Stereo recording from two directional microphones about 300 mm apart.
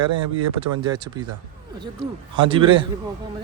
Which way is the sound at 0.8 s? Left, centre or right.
Centre.